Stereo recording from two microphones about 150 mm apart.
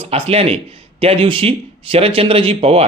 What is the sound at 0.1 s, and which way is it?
Speech, 40° right (ahead or behind).